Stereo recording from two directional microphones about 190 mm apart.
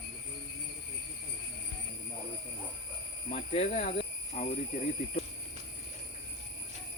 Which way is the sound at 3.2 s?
35° left (ahead or behind).